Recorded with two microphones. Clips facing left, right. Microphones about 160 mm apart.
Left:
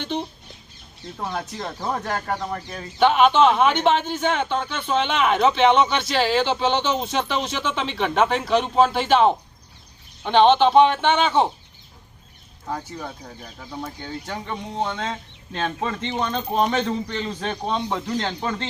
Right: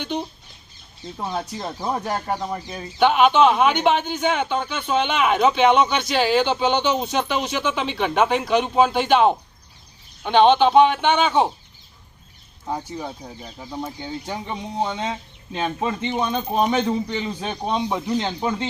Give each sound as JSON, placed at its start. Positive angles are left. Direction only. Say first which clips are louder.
{"t": 0.0, "sound": "speech", "louder": "even", "side_deg": 0}
{"t": 1.3, "sound": "speech", "louder": "right 2 dB", "side_deg": -15}
{"t": 3.0, "sound": "speech", "louder": "even", "side_deg": 0}
{"t": 12.6, "sound": "speech", "louder": "right 2 dB", "side_deg": -15}